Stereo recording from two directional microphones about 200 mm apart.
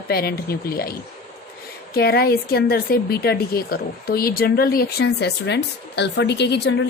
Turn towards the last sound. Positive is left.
turn(degrees=60)  # may be behind; listen again after turning